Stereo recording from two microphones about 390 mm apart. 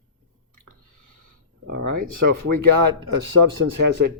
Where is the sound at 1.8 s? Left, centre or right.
Right.